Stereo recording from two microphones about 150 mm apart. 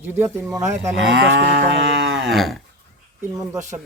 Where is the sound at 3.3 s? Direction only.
20° right (ahead or behind).